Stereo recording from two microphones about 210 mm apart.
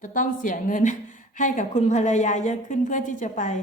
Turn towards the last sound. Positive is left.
turn(degrees=35)  # may be behind; listen again after turning